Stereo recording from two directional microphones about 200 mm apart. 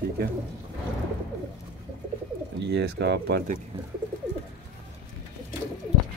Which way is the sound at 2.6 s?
60° right (ahead or behind).